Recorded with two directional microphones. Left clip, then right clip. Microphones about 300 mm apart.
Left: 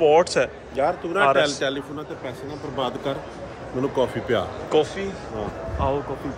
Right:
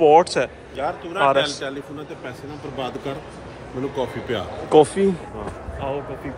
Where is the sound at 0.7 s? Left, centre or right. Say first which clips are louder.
Left 4 dB; left.